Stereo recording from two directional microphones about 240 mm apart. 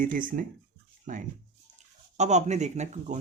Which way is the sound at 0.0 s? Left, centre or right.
Right.